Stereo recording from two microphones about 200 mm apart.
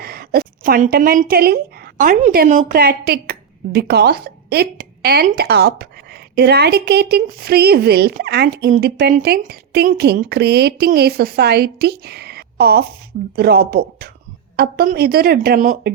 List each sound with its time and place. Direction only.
0.0 s a woman's voice: 50° right (ahead or behind)